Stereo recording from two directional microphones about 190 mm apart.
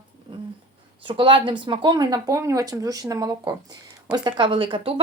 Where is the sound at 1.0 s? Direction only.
25° right (ahead or behind).